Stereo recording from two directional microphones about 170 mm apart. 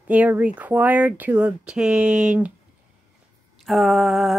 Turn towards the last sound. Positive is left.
turn(degrees=0)  # may be behind; listen again after turning